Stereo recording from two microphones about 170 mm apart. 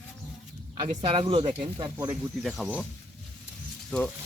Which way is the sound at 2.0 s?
5° right (ahead or behind).